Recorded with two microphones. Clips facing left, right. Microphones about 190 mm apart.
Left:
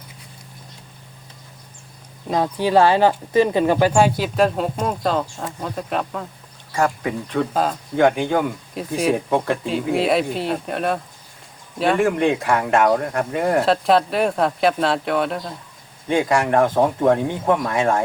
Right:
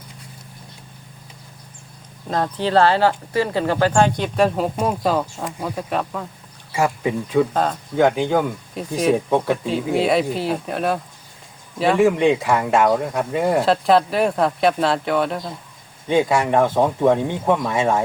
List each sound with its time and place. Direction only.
2.3 s speech: 10° left (ahead or behind); by 7.4 s 10° right (ahead or behind)
7.5 s speech: 5° left (ahead or behind)